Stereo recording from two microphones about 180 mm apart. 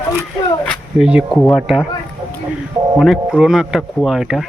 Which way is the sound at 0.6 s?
5° right (ahead or behind).